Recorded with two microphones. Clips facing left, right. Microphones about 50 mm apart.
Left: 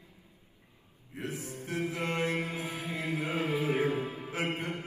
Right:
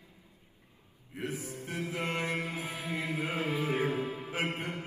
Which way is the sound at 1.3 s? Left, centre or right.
Left.